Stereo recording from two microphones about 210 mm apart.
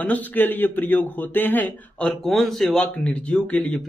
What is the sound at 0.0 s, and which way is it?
A man's voice, 5° left (ahead or behind).